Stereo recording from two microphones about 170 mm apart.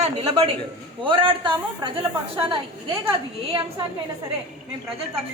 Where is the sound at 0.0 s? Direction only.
35° right (ahead or behind).